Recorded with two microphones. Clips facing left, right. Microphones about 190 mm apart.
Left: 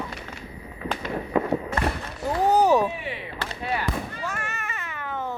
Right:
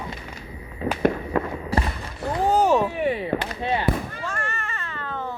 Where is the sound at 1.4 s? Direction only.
15° left (ahead or behind).